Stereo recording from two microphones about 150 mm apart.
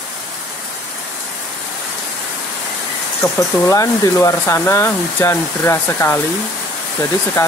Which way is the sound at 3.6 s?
20° left (ahead or behind).